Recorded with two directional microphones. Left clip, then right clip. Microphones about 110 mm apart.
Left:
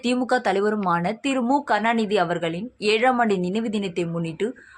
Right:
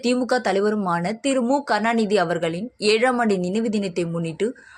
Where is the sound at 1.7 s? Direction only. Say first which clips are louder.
Right 2 dB; 35° right (ahead or behind).